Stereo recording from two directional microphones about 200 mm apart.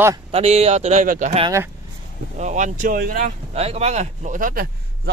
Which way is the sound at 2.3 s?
35° right (ahead or behind).